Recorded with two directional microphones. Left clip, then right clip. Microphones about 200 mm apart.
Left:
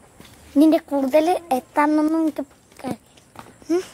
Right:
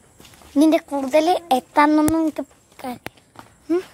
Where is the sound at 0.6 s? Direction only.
5° left (ahead or behind).